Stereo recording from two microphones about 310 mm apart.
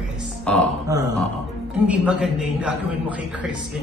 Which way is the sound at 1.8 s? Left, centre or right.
Centre.